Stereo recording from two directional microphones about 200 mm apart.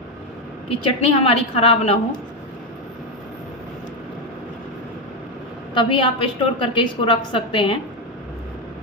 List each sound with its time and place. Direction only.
1.0 s a woman's voice: 25° left (ahead or behind)
5.8 s a woman's voice: 25° left (ahead or behind)